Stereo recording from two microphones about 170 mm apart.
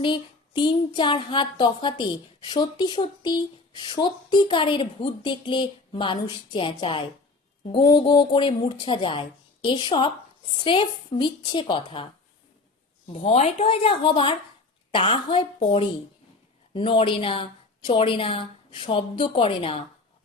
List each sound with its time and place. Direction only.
0.0 s speech: 30° left (ahead or behind)
13.1 s a woman's voice: 40° left (ahead or behind)